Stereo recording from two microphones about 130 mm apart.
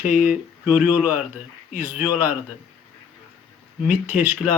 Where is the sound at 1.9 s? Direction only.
15° right (ahead or behind).